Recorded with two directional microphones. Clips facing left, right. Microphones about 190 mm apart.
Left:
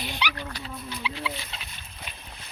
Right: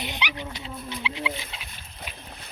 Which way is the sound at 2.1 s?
5° right (ahead or behind).